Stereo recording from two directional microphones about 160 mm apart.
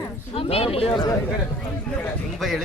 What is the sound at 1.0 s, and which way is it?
Speech, 25° left (ahead or behind).